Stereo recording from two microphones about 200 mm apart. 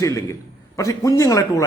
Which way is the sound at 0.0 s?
15° left (ahead or behind).